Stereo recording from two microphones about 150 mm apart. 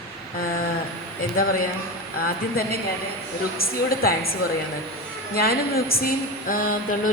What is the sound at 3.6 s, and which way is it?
A woman's voice, 90° left.